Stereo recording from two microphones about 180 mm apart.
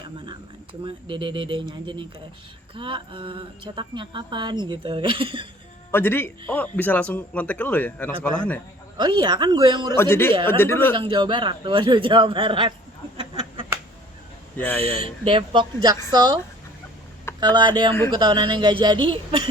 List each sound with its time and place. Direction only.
0.3 s a woman's voice: 30° right (ahead or behind)
5.9 s a man's voice: 10° left (ahead or behind)
9.0 s a woman's voice: 25° right (ahead or behind)
9.9 s a man's voice: 15° left (ahead or behind)
10.9 s a woman's voice: 25° right (ahead or behind)
13.1 s a sound: 30° right (ahead or behind)
14.5 s speech: 10° left (ahead or behind)
15.0 s a woman's voice: 30° right (ahead or behind)
17.4 s a woman's voice: 25° right (ahead or behind)